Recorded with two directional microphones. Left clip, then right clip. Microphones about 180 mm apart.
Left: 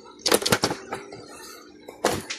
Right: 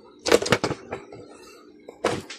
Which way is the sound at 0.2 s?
10° right (ahead or behind).